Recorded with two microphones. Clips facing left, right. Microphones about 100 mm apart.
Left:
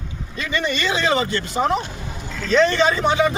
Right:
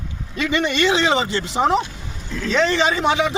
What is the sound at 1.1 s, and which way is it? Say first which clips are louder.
Speech: even; 20° right (ahead or behind).